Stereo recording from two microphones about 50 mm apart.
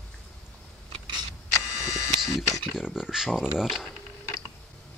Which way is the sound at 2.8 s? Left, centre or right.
Centre.